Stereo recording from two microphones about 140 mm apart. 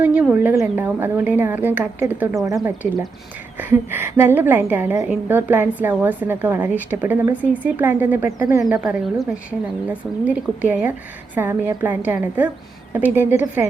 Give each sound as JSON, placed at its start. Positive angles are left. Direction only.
{"t": 0.0, "sound": "a woman's voice", "side_deg": -10}
{"t": 3.6, "sound": "a woman's voice", "side_deg": -15}
{"t": 8.6, "sound": "a woman's voice", "side_deg": -5}